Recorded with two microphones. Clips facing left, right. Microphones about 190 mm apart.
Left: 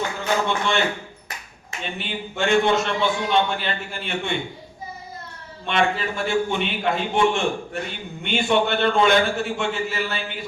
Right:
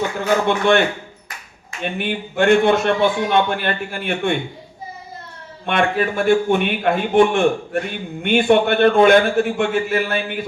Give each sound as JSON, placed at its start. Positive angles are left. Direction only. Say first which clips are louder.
{"t": 0.4, "sound": "a man's voice", "louder": "right 7 dB", "side_deg": -55}
{"t": 5.6, "sound": "a man's voice", "louder": "right 4 dB", "side_deg": -55}